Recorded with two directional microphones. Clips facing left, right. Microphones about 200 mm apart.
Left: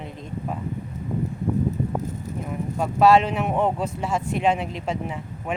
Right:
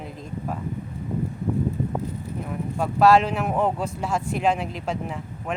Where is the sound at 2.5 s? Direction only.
Centre (ahead or behind).